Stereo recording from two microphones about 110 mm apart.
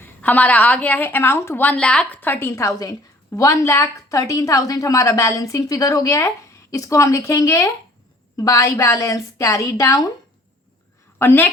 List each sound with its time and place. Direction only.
0.0 s a woman's voice: 15° left (ahead or behind)
2.5 s a woman's voice: 30° left (ahead or behind)
11.2 s a woman's voice: 20° left (ahead or behind)